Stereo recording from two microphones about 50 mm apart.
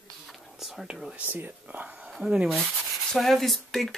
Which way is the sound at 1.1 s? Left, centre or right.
Right.